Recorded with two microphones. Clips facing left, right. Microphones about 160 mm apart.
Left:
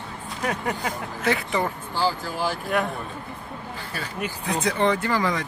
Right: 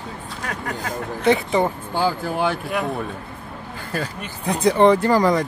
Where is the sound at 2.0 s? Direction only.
55° right (ahead or behind).